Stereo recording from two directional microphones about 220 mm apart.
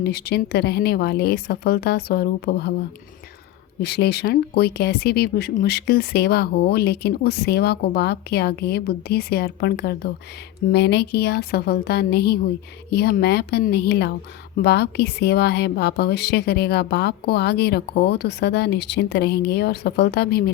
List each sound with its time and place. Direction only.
0.0 s speech: 45° left (ahead or behind)
3.8 s speech: 50° left (ahead or behind)